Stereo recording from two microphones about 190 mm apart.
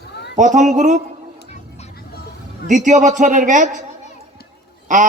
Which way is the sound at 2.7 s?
40° right (ahead or behind).